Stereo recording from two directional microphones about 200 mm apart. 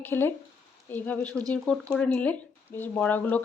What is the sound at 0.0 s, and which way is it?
Speech, 10° left (ahead or behind).